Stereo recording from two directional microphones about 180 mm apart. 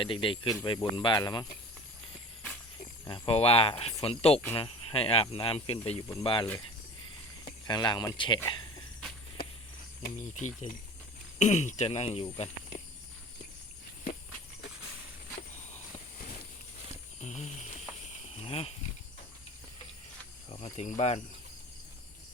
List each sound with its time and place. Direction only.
0.0 s speech: 30° left (ahead or behind)
3.1 s speech: 30° left (ahead or behind)
7.7 s speech: 25° left (ahead or behind)
10.3 s speech: 45° left (ahead or behind)
17.2 s a sound: 40° left (ahead or behind)
20.5 s speech: 40° left (ahead or behind)